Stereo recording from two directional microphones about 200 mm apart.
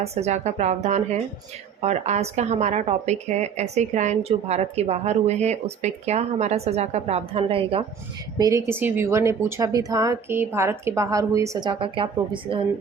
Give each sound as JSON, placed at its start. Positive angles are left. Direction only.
{"t": 0.0, "sound": "speech", "side_deg": -30}
{"t": 8.4, "sound": "speech", "side_deg": -15}